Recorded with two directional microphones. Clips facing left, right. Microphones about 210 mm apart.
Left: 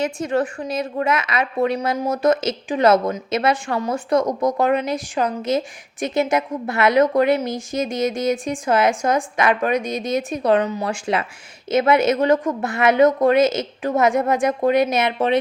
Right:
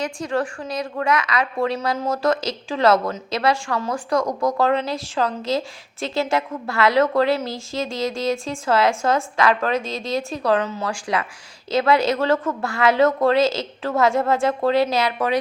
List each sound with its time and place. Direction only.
0.0 s a woman's voice: 20° left (ahead or behind)